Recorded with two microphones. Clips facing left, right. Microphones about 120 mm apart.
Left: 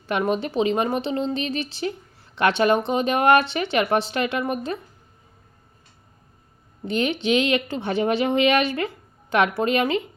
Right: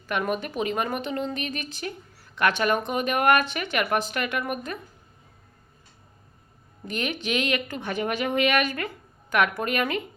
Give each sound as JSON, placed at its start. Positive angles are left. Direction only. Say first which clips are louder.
{"t": 0.1, "sound": "speech", "louder": "left 4 dB", "side_deg": 30}
{"t": 6.8, "sound": "speech", "louder": "left 7 dB", "side_deg": 30}